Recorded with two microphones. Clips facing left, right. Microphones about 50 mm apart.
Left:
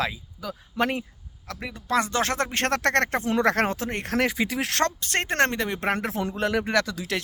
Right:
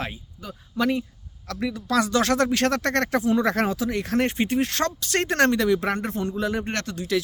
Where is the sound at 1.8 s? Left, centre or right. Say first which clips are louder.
Right 2 dB; left.